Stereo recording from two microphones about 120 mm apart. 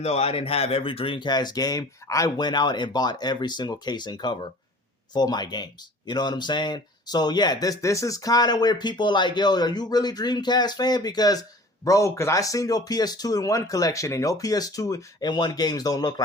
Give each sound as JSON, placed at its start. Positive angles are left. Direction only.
{"t": 0.0, "sound": "speech", "side_deg": 60}